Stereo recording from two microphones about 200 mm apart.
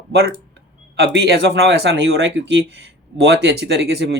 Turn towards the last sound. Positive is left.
turn(degrees=-60)  # may be behind; listen again after turning